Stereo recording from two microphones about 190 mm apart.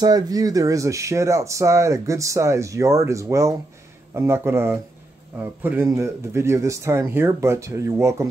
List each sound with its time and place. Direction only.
0.0 s speech: 20° right (ahead or behind)